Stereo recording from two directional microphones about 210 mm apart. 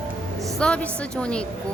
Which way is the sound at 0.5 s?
5° left (ahead or behind).